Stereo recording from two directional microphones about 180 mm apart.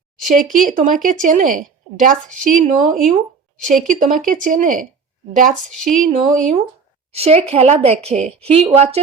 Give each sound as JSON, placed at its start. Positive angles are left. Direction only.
{"t": 0.6, "sound": "a woman's voice", "side_deg": -45}
{"t": 7.1, "sound": "a woman's voice", "side_deg": -35}